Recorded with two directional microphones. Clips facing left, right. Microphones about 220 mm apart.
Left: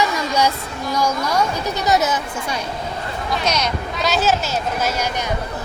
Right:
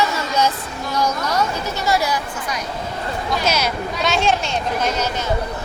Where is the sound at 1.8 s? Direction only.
20° left (ahead or behind).